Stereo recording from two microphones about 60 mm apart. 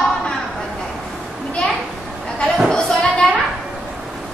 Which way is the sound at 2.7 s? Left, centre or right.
Centre.